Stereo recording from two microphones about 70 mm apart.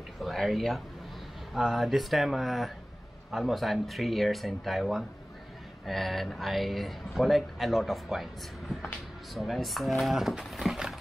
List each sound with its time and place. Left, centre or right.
0.2 s speech: centre